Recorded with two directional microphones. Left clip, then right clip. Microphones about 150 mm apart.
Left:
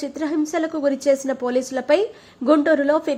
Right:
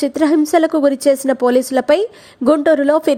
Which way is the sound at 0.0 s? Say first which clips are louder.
Right 9 dB; 45° right (ahead or behind).